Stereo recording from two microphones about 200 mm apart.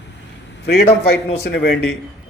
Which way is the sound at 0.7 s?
50° left (ahead or behind).